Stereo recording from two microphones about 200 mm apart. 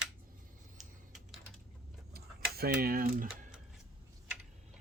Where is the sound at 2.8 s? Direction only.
50° right (ahead or behind).